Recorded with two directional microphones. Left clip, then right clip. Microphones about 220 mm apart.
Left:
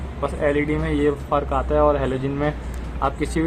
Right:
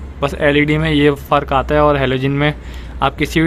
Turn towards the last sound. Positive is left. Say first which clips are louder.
# right 7 dB
turn(degrees=-50)  # may be behind; listen again after turning